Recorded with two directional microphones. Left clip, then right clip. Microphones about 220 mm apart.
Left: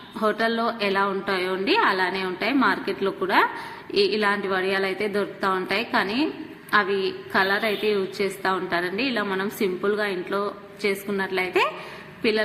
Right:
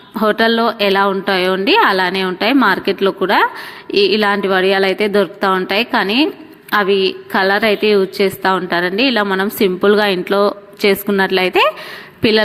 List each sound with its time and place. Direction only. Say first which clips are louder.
0.2 s a woman's voice: right 10 dB; 40° right (ahead or behind)